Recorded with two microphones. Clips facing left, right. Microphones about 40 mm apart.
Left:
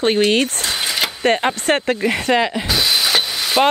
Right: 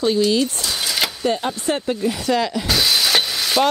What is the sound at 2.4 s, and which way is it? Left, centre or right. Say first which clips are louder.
Speech: left 3 dB; left.